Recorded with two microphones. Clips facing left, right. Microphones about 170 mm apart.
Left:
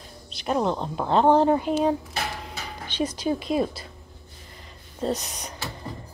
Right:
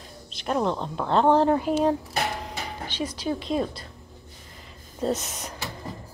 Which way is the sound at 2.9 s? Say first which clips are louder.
Left 4 dB; 20° left (ahead or behind).